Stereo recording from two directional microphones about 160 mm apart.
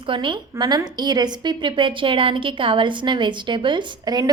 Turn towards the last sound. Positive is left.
turn(degrees=-25)  # may be behind; listen again after turning